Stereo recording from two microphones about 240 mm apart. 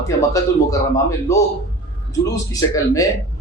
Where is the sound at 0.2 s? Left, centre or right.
Centre.